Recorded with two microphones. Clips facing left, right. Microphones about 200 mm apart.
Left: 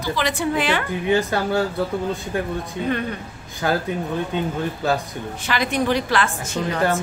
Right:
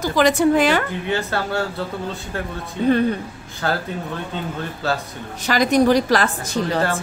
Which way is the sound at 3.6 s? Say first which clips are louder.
Left 2 dB; 15° left (ahead or behind).